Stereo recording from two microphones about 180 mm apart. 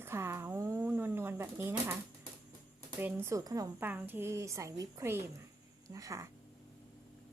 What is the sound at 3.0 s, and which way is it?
Speech, 10° right (ahead or behind).